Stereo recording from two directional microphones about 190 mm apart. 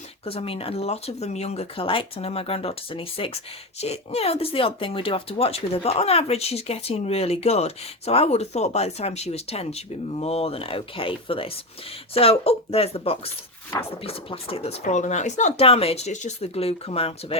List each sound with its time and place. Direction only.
0.3 s speech: 30° left (ahead or behind)